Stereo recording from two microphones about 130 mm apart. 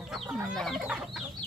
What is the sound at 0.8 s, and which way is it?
Chicken, 10° right (ahead or behind).